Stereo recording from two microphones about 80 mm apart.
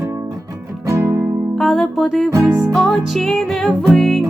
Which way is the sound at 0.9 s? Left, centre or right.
Right.